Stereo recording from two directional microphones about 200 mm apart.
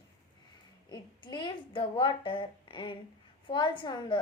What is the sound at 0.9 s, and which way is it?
A woman's voice, 20° left (ahead or behind).